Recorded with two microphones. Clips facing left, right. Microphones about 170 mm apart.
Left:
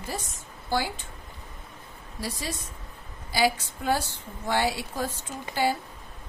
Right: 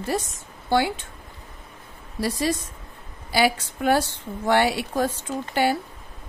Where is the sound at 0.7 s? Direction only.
70° right (ahead or behind).